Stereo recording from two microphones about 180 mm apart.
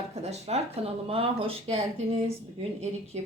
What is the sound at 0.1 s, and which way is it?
Speech, 35° right (ahead or behind).